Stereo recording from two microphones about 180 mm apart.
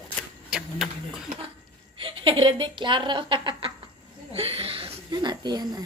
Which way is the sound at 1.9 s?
30° right (ahead or behind).